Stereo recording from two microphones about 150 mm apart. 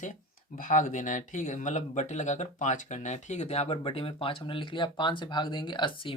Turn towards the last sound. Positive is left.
turn(degrees=35)  # may be behind; listen again after turning